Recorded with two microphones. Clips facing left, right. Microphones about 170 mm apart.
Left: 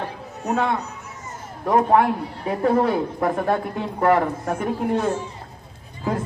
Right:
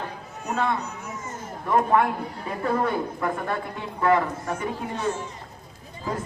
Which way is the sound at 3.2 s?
45° left (ahead or behind).